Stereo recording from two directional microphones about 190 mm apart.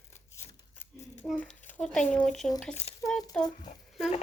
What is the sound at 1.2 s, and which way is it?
Speech, centre (ahead or behind).